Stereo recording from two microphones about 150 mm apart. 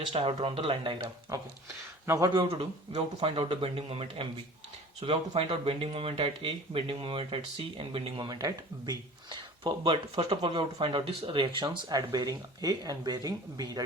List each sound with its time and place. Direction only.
0.1 s speech: 40° right (ahead or behind)
2.0 s speech: 25° right (ahead or behind)